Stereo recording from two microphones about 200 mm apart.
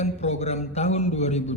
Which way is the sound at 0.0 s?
35° left (ahead or behind).